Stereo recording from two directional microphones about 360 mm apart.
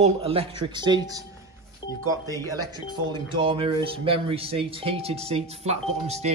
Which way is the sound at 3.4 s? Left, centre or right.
Centre.